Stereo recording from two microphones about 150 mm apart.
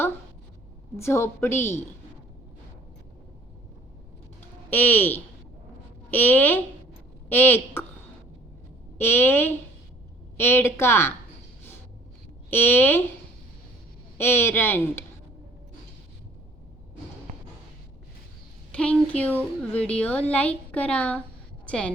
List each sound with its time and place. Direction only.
0.9 s a woman's voice: 20° left (ahead or behind)
4.7 s a woman's voice: 10° left (ahead or behind)
9.0 s a woman's voice: 15° left (ahead or behind)
12.5 s a woman's voice: 15° left (ahead or behind)
14.2 s a woman's voice: 15° left (ahead or behind)
18.7 s a woman's voice: 10° left (ahead or behind)